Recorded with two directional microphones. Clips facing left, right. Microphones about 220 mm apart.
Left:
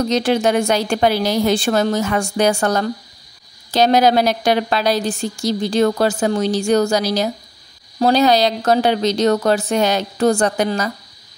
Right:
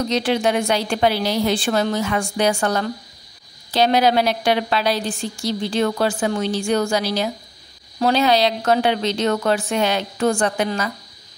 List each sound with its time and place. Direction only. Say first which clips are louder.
0.1 s a woman's voice: left 2 dB; 45° left (ahead or behind)